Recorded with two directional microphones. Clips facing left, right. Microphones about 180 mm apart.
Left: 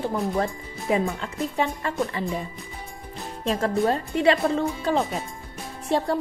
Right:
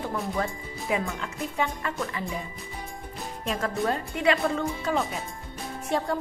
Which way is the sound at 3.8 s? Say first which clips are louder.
Left 4 dB; 30° left (ahead or behind).